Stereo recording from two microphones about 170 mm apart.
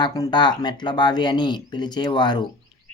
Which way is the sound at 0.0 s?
25° left (ahead or behind).